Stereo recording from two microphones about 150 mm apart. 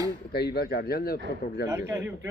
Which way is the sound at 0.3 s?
90° left.